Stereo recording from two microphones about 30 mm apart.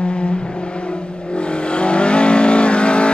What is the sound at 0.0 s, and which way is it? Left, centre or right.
Vehicle, left.